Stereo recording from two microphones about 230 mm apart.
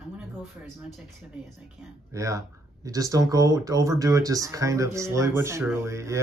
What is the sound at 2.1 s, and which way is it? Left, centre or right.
Speech, centre.